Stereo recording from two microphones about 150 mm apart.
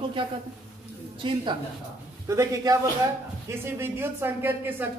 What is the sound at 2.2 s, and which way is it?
A man's voice, 20° right (ahead or behind).